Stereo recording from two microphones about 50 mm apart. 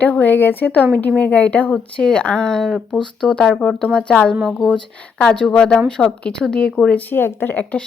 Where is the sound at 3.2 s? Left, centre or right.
Centre.